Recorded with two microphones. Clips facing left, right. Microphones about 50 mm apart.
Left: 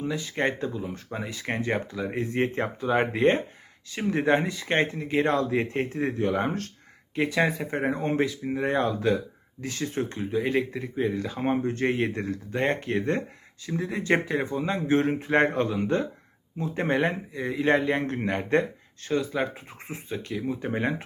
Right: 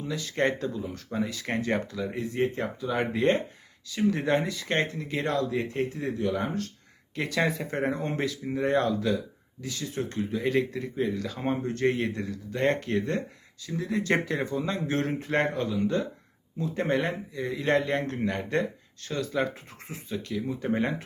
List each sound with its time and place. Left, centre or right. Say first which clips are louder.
0.0 s speech: even; left
2.1 s speech: left 2 dB; left
7.2 s speech: left 3 dB; centre
9.0 s speech: left 3 dB; left
10.1 s speech: right 2 dB; centre
14.1 s speech: left 4 dB; centre
14.4 s speech: left 2 dB; left
18.0 s speech: left 2 dB; left
19.9 s speech: left 1 dB; left